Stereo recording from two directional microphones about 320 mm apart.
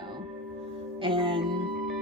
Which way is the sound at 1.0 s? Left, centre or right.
Centre.